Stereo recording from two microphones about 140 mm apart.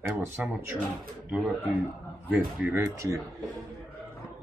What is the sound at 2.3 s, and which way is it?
Speech, 15° right (ahead or behind).